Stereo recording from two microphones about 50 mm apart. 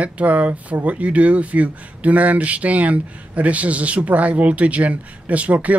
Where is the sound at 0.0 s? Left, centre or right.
Right.